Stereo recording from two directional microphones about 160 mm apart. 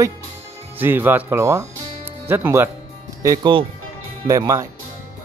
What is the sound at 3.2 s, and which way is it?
Speech, 25° right (ahead or behind).